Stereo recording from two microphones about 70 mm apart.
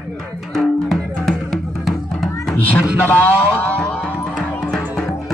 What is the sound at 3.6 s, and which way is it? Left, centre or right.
Music, left.